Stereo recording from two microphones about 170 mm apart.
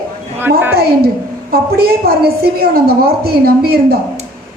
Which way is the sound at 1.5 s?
65° right (ahead or behind).